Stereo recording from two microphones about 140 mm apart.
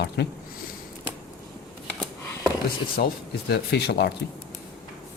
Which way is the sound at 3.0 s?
90° left.